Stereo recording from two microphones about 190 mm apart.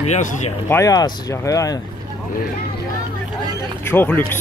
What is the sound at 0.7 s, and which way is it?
Speech, 15° left (ahead or behind).